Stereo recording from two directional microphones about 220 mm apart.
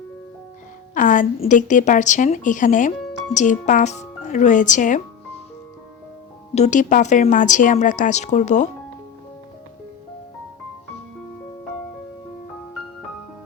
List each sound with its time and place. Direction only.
0.9 s speech: 35° left (ahead or behind)
6.5 s speech: 30° left (ahead or behind)